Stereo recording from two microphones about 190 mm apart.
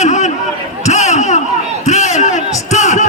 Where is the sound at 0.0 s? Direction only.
40° left (ahead or behind).